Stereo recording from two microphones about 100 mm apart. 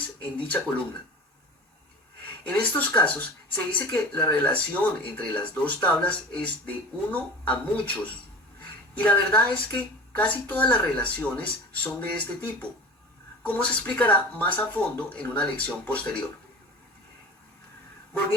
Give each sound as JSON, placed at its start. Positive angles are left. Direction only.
{"t": 0.2, "sound": "speech", "side_deg": 15}
{"t": 2.2, "sound": "speech", "side_deg": 15}